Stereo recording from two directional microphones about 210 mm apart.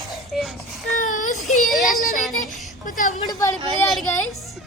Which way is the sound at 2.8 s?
40° left (ahead or behind).